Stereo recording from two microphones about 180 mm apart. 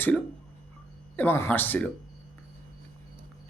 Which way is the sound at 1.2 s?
10° left (ahead or behind).